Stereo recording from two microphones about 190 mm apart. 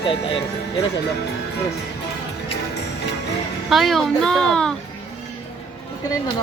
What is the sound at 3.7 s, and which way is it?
Speech, centre (ahead or behind).